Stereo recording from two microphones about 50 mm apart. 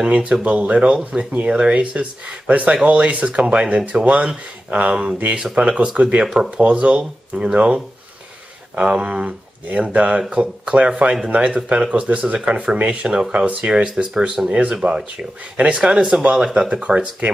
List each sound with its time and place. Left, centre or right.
0.3 s speech: right
6.2 s speech: centre
6.5 s speech: right
15.5 s speech: right
15.8 s speech: centre
16.1 s speech: right